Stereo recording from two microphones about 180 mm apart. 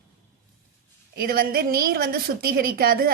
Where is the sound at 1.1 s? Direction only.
55° right (ahead or behind).